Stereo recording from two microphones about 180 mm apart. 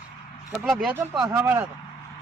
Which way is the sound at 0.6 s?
Centre (ahead or behind).